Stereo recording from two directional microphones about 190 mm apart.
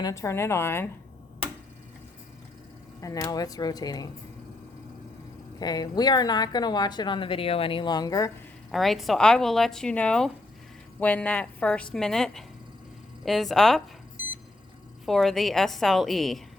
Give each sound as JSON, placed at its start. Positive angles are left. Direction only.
{"t": 0.0, "sound": "a woman's voice", "side_deg": 15}
{"t": 3.0, "sound": "speech", "side_deg": 15}
{"t": 5.5, "sound": "speech", "side_deg": 20}
{"t": 8.7, "sound": "speech", "side_deg": 0}
{"t": 15.0, "sound": "speech", "side_deg": 0}